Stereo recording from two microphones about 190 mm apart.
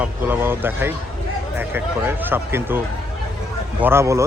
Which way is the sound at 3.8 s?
15° right (ahead or behind).